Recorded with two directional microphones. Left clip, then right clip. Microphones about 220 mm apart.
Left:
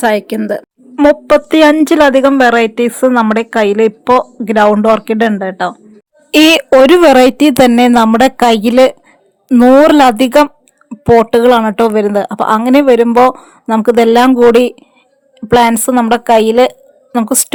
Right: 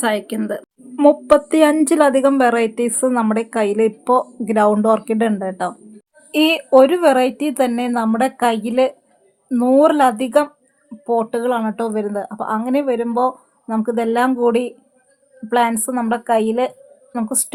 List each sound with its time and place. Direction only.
0.0 s a woman's voice: 25° left (ahead or behind)
6.3 s speech: 45° left (ahead or behind)